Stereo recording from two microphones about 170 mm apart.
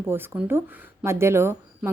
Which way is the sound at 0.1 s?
15° right (ahead or behind).